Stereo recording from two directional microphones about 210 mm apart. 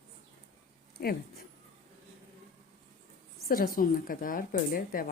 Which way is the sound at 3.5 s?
40° left (ahead or behind).